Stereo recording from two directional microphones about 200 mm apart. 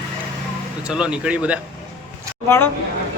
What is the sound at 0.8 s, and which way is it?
Speech, 5° right (ahead or behind).